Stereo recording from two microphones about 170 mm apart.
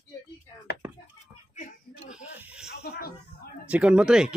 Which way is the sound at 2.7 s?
70° left (ahead or behind).